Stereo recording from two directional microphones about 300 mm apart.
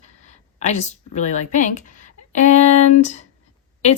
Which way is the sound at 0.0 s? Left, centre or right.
Left.